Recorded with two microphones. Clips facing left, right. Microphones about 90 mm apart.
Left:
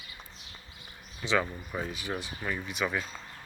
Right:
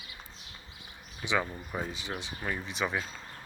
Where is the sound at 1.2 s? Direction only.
15° right (ahead or behind).